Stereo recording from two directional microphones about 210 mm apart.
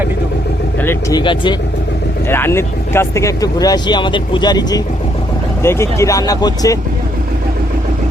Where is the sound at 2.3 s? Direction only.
10° left (ahead or behind).